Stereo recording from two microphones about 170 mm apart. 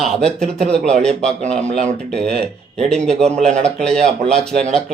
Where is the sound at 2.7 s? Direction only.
5° left (ahead or behind).